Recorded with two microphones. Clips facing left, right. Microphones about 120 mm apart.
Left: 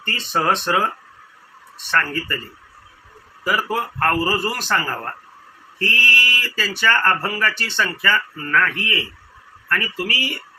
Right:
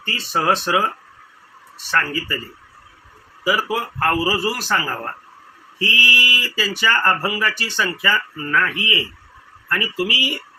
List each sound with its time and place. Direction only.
0.0 s speech: centre (ahead or behind)
3.4 s speech: 5° right (ahead or behind)